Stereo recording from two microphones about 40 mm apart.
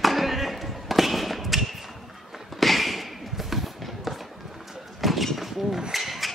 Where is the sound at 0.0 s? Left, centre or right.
Centre.